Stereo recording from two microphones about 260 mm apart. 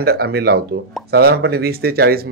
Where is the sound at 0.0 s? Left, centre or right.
Right.